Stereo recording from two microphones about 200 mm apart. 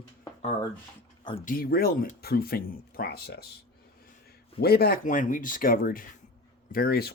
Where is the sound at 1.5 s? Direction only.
45° left (ahead or behind).